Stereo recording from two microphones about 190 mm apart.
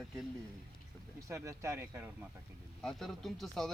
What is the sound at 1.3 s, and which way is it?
Speech, 15° right (ahead or behind).